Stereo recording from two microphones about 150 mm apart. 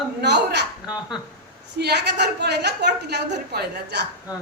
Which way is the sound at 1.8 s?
90° right.